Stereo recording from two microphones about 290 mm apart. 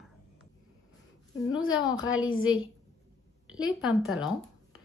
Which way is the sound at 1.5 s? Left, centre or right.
Centre.